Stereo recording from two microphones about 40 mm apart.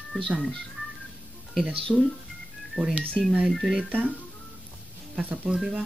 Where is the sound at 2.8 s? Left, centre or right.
Right.